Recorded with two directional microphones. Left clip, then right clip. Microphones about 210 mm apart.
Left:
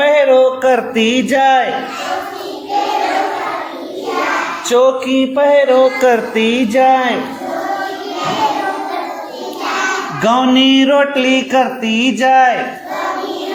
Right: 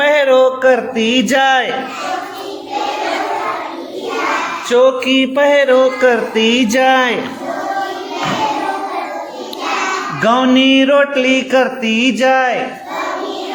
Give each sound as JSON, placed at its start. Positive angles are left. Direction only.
{"t": 0.0, "sound": "a sound", "side_deg": -25}
{"t": 0.6, "sound": "music", "side_deg": 0}
{"t": 1.3, "sound": "mantra", "side_deg": -25}
{"t": 4.7, "sound": "music", "side_deg": 0}
{"t": 5.0, "sound": "mantra", "side_deg": -20}
{"t": 6.0, "sound": "music", "side_deg": -5}
{"t": 6.7, "sound": "speech", "side_deg": -30}
{"t": 10.2, "sound": "music", "side_deg": -10}